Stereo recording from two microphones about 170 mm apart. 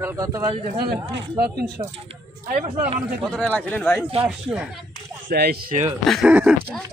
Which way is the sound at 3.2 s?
Centre (ahead or behind).